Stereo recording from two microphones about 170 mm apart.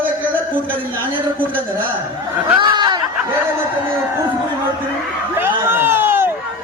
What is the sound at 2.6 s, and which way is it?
Speech, 25° right (ahead or behind).